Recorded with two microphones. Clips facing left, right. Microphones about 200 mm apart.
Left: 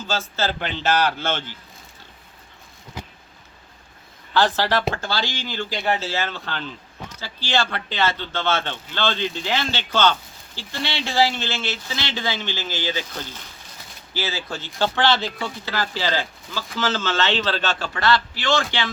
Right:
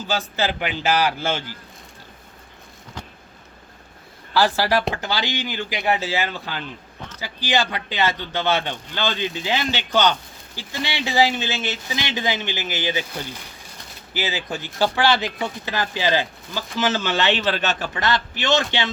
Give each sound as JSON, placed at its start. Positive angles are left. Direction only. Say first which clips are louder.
{"t": 0.1, "sound": "a man's voice", "louder": "right 1 dB", "side_deg": -15}
{"t": 3.0, "sound": "a sound", "louder": "left 1 dB", "side_deg": 10}
{"t": 4.4, "sound": "a man's voice", "louder": "right 1 dB", "side_deg": -10}